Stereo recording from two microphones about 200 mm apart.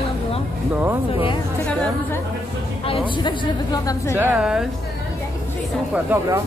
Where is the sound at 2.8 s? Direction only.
25° left (ahead or behind).